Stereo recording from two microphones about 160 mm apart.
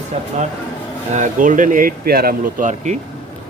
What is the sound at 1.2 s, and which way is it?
Speech, 55° right (ahead or behind).